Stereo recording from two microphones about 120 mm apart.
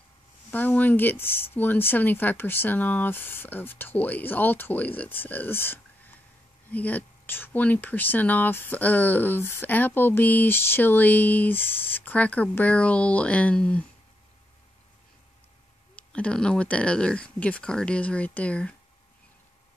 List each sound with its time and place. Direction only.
0.5 s speech: 15° left (ahead or behind)
16.0 s speech: 10° left (ahead or behind)